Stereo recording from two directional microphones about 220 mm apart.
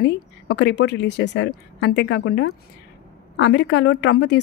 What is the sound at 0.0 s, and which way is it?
Speech, 50° left (ahead or behind).